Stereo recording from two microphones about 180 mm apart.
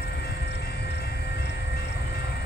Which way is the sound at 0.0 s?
60° left (ahead or behind).